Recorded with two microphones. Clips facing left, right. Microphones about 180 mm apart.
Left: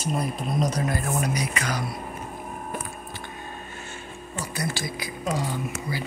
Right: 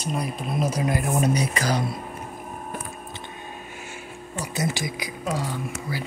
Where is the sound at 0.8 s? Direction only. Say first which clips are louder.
Right 4 dB; 20° right (ahead or behind).